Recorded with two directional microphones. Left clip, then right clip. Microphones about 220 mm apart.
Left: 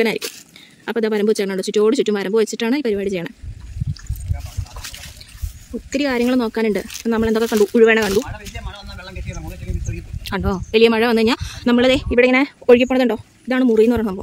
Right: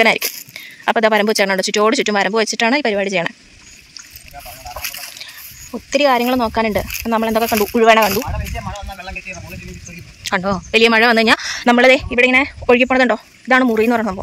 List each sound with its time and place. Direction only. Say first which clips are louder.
0.0 s speech: right 6 dB; 5° left (ahead or behind)
5.9 s speech: right 5 dB; 5° left (ahead or behind)
10.2 s speech: right 5 dB; 5° left (ahead or behind)